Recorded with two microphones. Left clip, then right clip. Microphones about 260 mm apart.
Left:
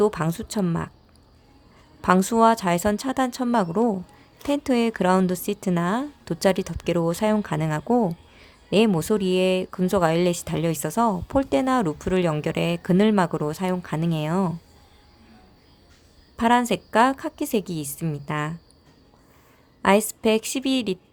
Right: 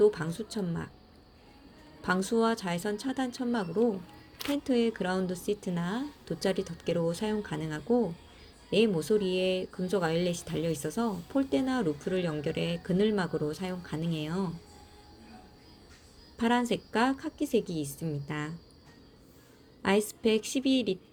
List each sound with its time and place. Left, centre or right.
0.0 s speech: left
2.0 s speech: left
16.4 s speech: left
19.8 s speech: left